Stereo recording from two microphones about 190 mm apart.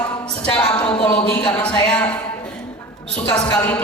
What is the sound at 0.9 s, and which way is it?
A woman's voice, 5° left (ahead or behind).